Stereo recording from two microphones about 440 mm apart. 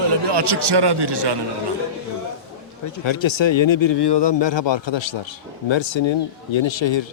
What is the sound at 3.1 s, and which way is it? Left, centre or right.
Speech, left.